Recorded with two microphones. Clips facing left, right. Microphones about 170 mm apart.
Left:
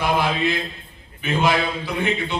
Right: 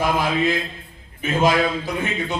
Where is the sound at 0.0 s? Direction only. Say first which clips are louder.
Right 1 dB; 45° right (ahead or behind).